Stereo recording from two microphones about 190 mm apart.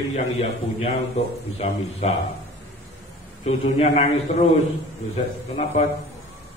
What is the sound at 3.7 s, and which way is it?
Speech, 35° left (ahead or behind).